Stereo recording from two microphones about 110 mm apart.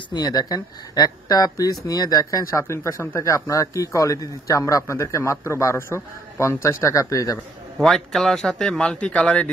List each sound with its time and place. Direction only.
0.1 s a man's voice: 35° left (ahead or behind)
7.8 s speech: 5° left (ahead or behind)